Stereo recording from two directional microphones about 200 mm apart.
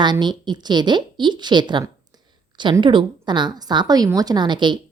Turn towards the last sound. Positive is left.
turn(degrees=-25)  # may be behind; listen again after turning